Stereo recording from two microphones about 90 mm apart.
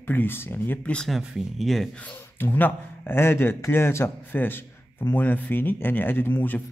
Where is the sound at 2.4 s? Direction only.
25° left (ahead or behind).